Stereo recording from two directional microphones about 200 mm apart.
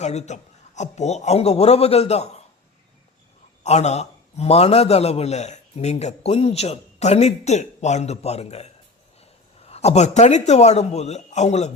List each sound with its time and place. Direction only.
0.0 s a man's voice: 35° left (ahead or behind)
3.6 s a man's voice: 35° left (ahead or behind)